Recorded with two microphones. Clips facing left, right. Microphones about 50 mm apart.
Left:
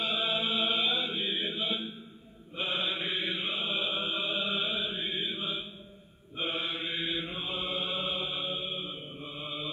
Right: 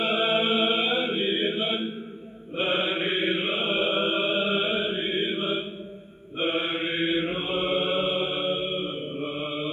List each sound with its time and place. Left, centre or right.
0.0 s chant: right
2.5 s mantra: right